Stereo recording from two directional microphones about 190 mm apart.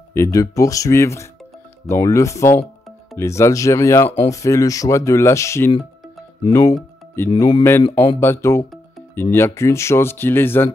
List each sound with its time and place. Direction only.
0.1 s speech: 15° left (ahead or behind)